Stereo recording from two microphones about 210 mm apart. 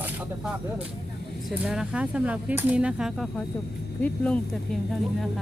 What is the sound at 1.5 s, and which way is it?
Speech, centre (ahead or behind).